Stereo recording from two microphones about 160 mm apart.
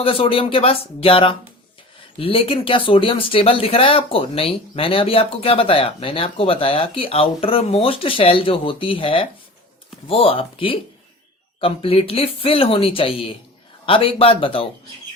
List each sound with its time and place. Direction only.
0.0 s speech: 35° left (ahead or behind)